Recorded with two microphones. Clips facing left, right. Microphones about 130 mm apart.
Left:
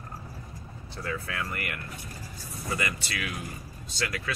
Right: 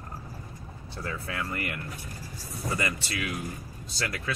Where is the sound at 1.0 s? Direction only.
30° right (ahead or behind).